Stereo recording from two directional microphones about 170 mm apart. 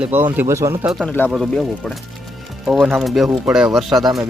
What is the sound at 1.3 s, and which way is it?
Speech, centre (ahead or behind).